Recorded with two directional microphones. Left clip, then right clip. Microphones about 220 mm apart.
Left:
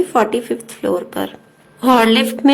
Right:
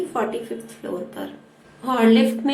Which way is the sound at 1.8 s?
55° left (ahead or behind).